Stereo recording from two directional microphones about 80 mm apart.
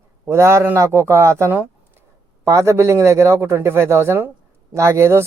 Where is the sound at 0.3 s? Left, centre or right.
Right.